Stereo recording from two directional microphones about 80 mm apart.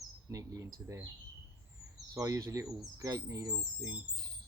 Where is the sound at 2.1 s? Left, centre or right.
Right.